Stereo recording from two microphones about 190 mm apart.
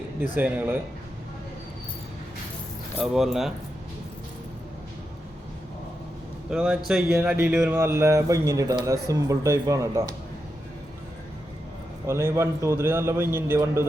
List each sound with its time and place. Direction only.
0.3 s a man's voice: 10° right (ahead or behind)
3.0 s speech: centre (ahead or behind)
6.5 s a man's voice: 5° right (ahead or behind)
12.0 s a man's voice: 15° right (ahead or behind)